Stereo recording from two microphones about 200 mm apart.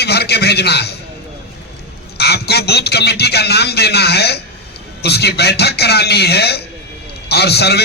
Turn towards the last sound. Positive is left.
turn(degrees=55)  # may be behind; listen again after turning